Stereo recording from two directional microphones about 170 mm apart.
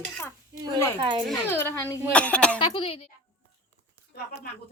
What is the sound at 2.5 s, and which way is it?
Speech, 35° left (ahead or behind).